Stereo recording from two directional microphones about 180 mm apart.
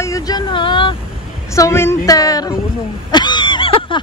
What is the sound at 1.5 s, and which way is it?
Speech, 15° left (ahead or behind).